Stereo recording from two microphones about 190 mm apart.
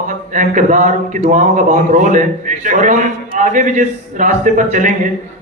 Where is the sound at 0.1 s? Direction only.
40° right (ahead or behind).